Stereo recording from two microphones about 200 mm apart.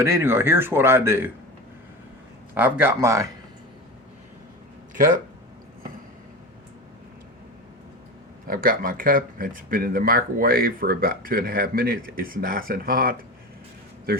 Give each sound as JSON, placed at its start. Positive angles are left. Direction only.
{"t": 0.0, "sound": "speech", "side_deg": -10}
{"t": 2.6, "sound": "speech", "side_deg": -10}
{"t": 4.9, "sound": "speech", "side_deg": -45}
{"t": 8.4, "sound": "speech", "side_deg": -45}